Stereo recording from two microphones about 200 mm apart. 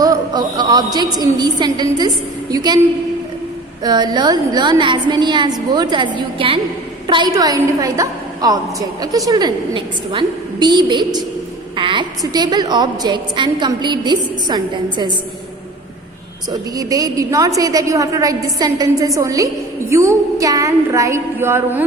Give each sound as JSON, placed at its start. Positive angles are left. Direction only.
{"t": 0.0, "sound": "a man's voice", "side_deg": -20}
{"t": 3.8, "sound": "a woman's voice", "side_deg": -20}
{"t": 16.5, "sound": "a woman's voice", "side_deg": -20}